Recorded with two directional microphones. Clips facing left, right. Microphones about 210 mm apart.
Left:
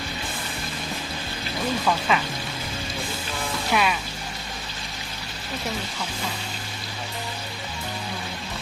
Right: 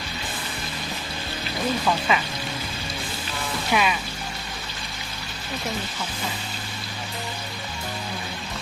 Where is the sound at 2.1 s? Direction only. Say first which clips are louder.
Even; 5° right (ahead or behind).